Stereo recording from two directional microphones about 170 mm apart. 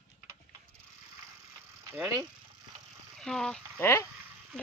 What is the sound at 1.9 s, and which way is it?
Speech, 15° right (ahead or behind).